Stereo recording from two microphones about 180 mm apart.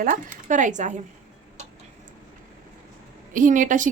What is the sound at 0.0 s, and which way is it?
Speech, 45° right (ahead or behind).